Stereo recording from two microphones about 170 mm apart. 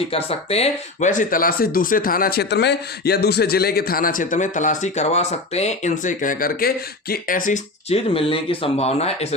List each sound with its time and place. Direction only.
0.1 s speech: 35° left (ahead or behind)